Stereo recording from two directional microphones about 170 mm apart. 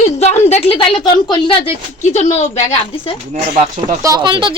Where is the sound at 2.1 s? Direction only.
45° left (ahead or behind).